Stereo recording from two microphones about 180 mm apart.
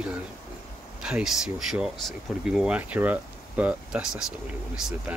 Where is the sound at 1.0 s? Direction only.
5° right (ahead or behind).